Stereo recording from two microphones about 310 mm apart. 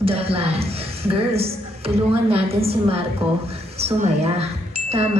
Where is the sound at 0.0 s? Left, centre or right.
Centre.